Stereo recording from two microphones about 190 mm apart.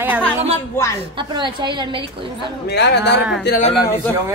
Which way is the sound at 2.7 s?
60° left (ahead or behind).